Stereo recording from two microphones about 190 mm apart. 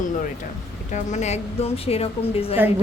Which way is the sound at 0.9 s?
40° left (ahead or behind).